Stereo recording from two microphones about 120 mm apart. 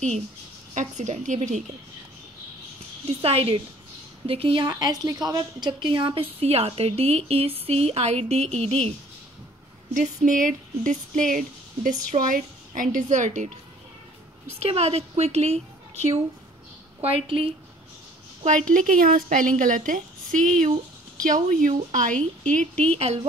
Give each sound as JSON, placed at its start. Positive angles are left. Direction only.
{"t": 0.7, "sound": "a woman's voice", "side_deg": -85}
{"t": 3.1, "sound": "a woman's voice", "side_deg": -55}
{"t": 9.9, "sound": "a woman's voice", "side_deg": -90}
{"t": 14.6, "sound": "speech", "side_deg": -60}
{"t": 17.0, "sound": "a woman's voice", "side_deg": -50}
{"t": 18.4, "sound": "a woman's voice", "side_deg": -80}
{"t": 22.1, "sound": "speech", "side_deg": 10}
{"t": 22.9, "sound": "speech", "side_deg": -60}